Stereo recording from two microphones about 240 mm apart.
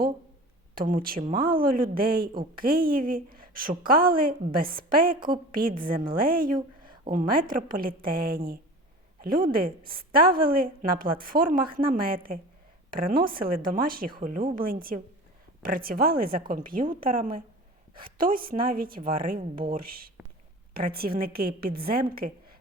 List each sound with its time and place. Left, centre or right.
0.8 s a woman's voice: right